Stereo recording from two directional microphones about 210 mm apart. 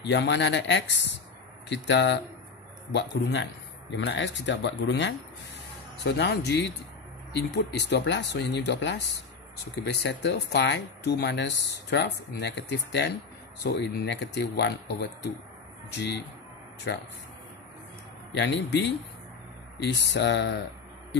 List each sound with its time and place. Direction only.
0.0 s speech: 55° left (ahead or behind)
18.4 s speech: 55° left (ahead or behind)